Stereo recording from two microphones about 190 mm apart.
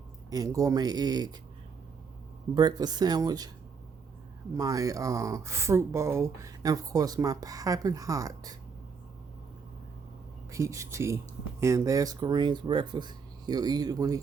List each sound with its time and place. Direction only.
0.3 s speech: 20° right (ahead or behind)
2.6 s speech: 20° right (ahead or behind)
4.5 s speech: 20° right (ahead or behind)
10.5 s speech: 15° right (ahead or behind)